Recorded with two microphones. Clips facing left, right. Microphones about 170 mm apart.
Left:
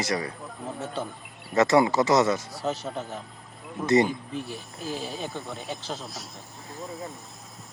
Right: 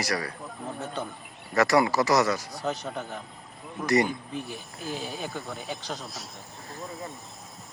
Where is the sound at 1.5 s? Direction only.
25° left (ahead or behind).